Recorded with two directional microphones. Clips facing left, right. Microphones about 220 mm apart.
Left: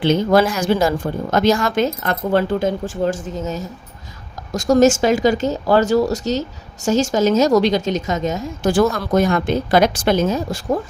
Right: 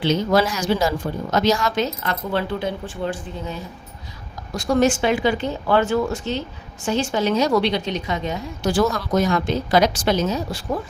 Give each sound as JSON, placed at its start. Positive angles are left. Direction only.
{"t": 0.0, "sound": "a woman's voice", "side_deg": 50}